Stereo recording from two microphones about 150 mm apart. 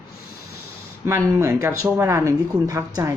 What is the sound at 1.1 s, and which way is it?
Speech, 20° right (ahead or behind).